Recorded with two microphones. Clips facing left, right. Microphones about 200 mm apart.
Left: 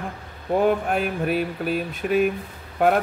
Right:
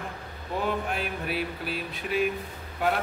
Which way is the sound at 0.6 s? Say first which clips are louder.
Left 8 dB; 45° left (ahead or behind).